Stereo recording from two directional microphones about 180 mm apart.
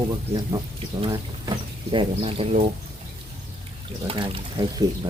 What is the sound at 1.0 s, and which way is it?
Speech, 25° right (ahead or behind).